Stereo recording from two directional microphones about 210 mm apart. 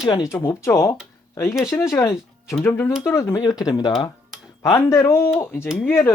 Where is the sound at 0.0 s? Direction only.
15° left (ahead or behind).